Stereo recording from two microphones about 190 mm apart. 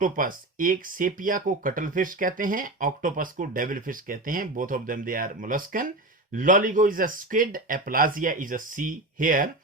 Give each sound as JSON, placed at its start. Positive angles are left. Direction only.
{"t": 0.0, "sound": "speech", "side_deg": -45}